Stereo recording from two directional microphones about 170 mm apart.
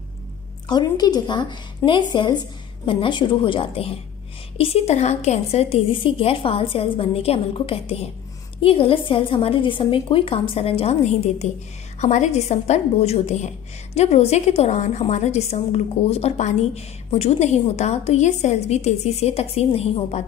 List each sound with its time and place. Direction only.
0.7 s a woman's voice: 25° left (ahead or behind)